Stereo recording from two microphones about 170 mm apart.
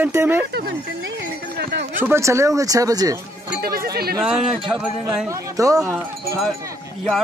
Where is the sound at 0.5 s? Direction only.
70° right (ahead or behind).